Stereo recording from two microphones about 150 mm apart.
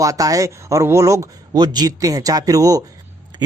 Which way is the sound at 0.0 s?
25° right (ahead or behind).